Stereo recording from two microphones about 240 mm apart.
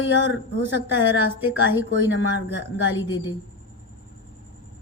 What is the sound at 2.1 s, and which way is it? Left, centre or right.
Speech, left.